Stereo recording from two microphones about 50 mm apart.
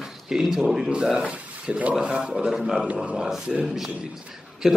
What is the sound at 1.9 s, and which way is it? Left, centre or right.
Speech, centre.